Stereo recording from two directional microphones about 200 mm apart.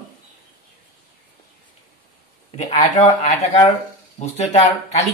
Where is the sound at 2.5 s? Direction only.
35° left (ahead or behind).